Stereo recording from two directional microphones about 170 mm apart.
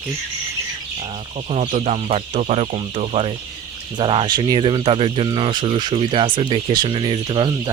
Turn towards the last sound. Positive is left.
turn(degrees=-25)  # may be behind; listen again after turning